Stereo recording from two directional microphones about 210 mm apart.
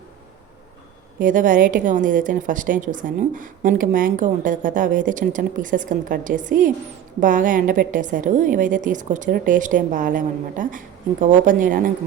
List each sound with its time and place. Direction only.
1.2 s a woman's voice: 40° right (ahead or behind)